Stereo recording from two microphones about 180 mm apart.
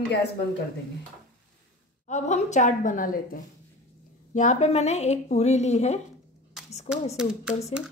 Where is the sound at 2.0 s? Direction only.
40° left (ahead or behind).